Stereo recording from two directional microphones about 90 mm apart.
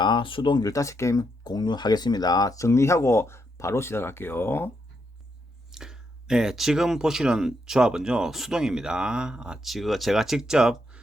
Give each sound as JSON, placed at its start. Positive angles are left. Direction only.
{"t": 0.0, "sound": "speech", "side_deg": 65}
{"t": 0.6, "sound": "speech", "side_deg": 35}
{"t": 5.7, "sound": "speech", "side_deg": -5}